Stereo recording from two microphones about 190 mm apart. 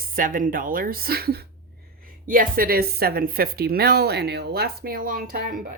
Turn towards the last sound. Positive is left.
turn(degrees=-50)  # may be behind; listen again after turning